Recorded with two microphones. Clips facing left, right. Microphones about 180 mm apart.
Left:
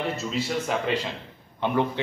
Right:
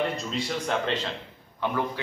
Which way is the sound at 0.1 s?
5° left (ahead or behind).